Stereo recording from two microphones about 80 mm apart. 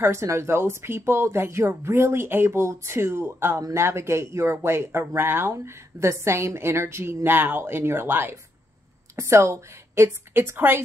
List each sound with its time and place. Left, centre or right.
0.0 s speech: right